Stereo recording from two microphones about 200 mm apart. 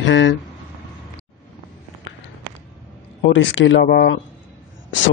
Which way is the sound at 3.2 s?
65° left (ahead or behind).